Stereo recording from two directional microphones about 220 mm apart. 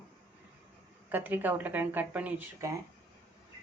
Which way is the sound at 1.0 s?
10° right (ahead or behind).